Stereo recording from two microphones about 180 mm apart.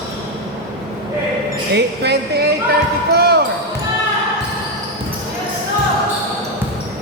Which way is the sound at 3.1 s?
65° right (ahead or behind).